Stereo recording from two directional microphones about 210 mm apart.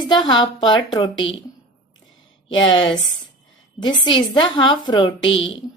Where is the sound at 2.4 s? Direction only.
20° left (ahead or behind).